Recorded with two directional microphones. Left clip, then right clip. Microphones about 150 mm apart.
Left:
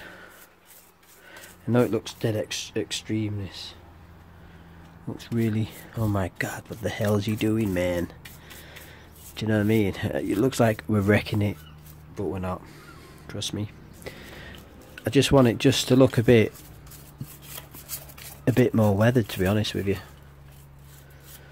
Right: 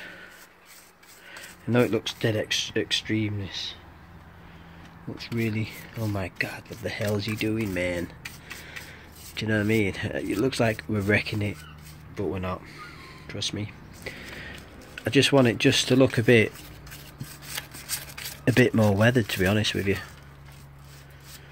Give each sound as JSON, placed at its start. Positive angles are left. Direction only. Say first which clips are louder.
{"t": 1.7, "sound": "speech", "louder": "even", "side_deg": 10}
{"t": 3.4, "sound": "speech", "louder": "right 5 dB", "side_deg": 15}
{"t": 5.5, "sound": "speech", "louder": "left 1 dB", "side_deg": 35}
{"t": 7.7, "sound": "speech", "louder": "left 2 dB", "side_deg": 25}
{"t": 9.3, "sound": "speech", "louder": "left 1 dB", "side_deg": 20}
{"t": 12.2, "sound": "speech", "louder": "even", "side_deg": 10}
{"t": 13.3, "sound": "a sound", "louder": "right 1 dB", "side_deg": 25}
{"t": 18.4, "sound": "speech", "louder": "right 1 dB", "side_deg": 10}